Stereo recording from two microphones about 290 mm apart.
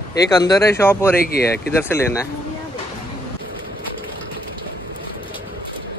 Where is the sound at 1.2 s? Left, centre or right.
Left.